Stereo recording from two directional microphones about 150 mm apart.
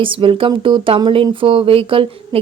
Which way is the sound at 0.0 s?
35° right (ahead or behind).